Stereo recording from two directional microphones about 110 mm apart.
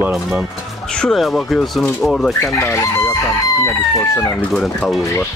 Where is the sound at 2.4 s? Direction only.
25° left (ahead or behind).